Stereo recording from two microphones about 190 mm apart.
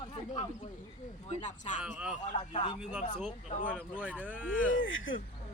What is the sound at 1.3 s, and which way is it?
Speech, 40° left (ahead or behind).